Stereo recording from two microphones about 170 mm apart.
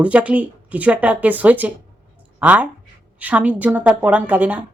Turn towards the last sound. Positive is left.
turn(degrees=-10)  # may be behind; listen again after turning